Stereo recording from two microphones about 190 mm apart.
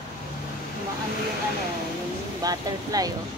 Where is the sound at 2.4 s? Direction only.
20° right (ahead or behind).